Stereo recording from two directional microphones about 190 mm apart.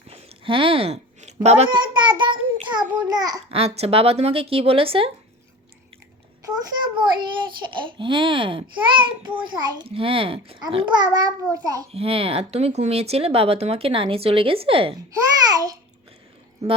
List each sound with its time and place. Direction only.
0.1 s a sound: 30° right (ahead or behind)
1.5 s child singing: 30° right (ahead or behind)
3.0 s a child's voice: 20° right (ahead or behind)
3.5 s speech: 30° right (ahead or behind)
6.4 s a child's voice: 20° right (ahead or behind)
11.9 s a child's voice: 30° right (ahead or behind)